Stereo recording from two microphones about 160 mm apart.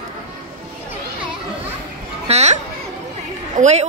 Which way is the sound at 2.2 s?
40° right (ahead or behind).